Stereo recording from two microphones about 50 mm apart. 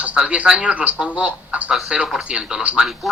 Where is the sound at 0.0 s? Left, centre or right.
Right.